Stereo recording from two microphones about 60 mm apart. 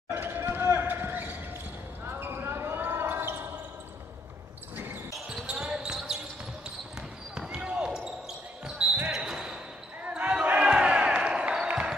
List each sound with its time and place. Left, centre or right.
0.1 s basketball bounce: right
4.7 s basketball bounce: right
5.3 s basketball bounce: centre
7.4 s basketball bounce: centre
10.0 s crowd: right